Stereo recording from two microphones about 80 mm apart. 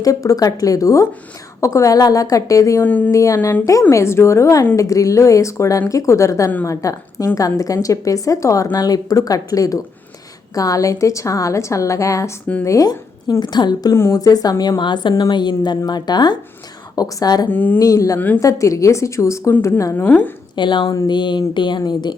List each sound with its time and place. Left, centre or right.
0.0 s speech: left
2.8 s a sound: centre
3.1 s a woman's voice: left
13.9 s a woman's voice: left
14.2 s speech: left
14.6 s a woman's voice: left
16.9 s speech: left
17.5 s a sound: left
17.7 s a woman's voice: left
20.1 s a sound: centre
20.6 s speech: left
21.1 s speech: left